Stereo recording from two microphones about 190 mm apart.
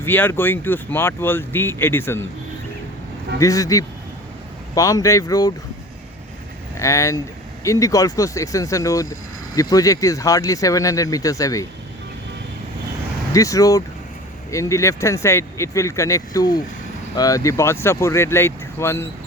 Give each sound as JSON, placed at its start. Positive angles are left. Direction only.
{"t": 0.0, "sound": "speech", "side_deg": 10}
{"t": 3.4, "sound": "speech", "side_deg": 20}
{"t": 6.7, "sound": "speech", "side_deg": 15}
{"t": 13.3, "sound": "speech", "side_deg": 15}